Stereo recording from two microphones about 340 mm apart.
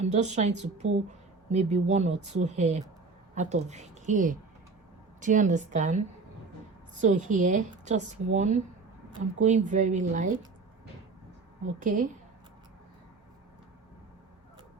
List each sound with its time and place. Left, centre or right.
0.0 s a woman's voice: centre
7.0 s a woman's voice: right
11.8 s a woman's voice: right